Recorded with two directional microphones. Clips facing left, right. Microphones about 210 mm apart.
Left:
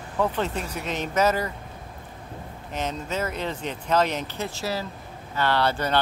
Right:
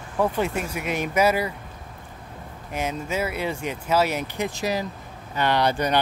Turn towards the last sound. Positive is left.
turn(degrees=-15)  # may be behind; listen again after turning